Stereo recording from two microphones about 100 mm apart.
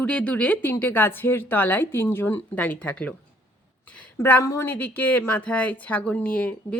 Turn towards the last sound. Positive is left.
turn(degrees=15)  # may be behind; listen again after turning